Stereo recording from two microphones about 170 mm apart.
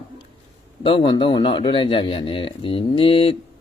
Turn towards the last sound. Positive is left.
turn(degrees=30)  # may be behind; listen again after turning